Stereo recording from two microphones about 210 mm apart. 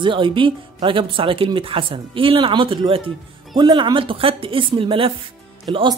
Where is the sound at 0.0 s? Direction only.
25° right (ahead or behind).